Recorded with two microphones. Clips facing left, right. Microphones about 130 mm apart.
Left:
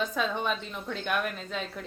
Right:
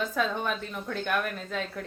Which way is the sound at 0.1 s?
15° left (ahead or behind).